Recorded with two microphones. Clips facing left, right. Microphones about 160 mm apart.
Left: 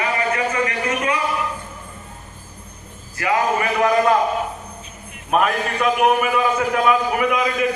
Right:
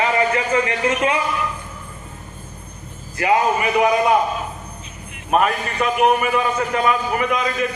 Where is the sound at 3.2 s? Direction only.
20° right (ahead or behind).